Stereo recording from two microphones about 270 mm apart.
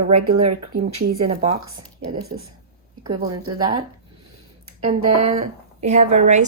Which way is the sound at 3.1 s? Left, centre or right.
Centre.